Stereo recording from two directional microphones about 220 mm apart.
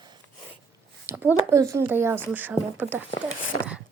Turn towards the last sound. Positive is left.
turn(degrees=70)  # may be behind; listen again after turning